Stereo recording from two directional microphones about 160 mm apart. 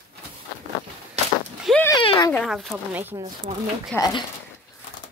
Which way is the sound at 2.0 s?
30° left (ahead or behind).